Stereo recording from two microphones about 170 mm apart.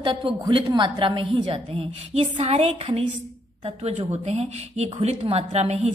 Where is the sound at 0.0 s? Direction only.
30° right (ahead or behind).